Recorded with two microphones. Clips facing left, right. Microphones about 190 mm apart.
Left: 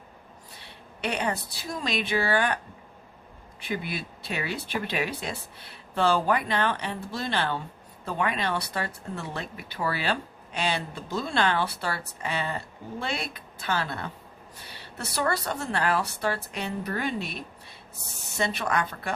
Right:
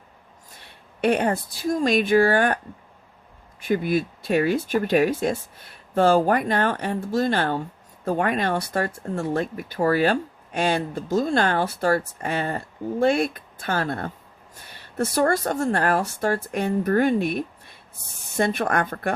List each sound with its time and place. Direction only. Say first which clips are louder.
0.5 s speech: even; 50° right (ahead or behind)
3.6 s speech: right 10 dB; 45° right (ahead or behind)